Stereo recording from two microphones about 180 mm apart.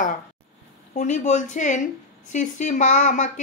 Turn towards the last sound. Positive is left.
turn(degrees=45)  # may be behind; listen again after turning